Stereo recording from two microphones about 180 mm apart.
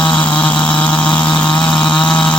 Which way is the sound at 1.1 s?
5° left (ahead or behind).